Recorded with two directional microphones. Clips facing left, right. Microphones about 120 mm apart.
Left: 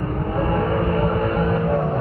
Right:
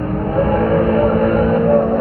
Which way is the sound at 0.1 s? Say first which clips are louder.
Right 7 dB; 55° right (ahead or behind).